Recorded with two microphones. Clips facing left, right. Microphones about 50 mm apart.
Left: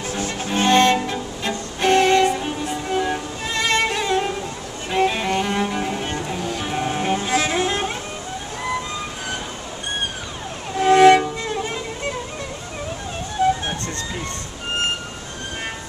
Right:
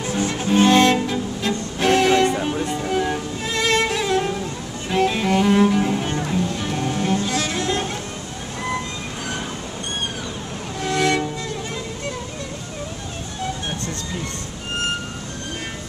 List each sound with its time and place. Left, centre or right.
0.3 s music: centre
4.9 s cello: centre
10.8 s music: left
13.4 s music: left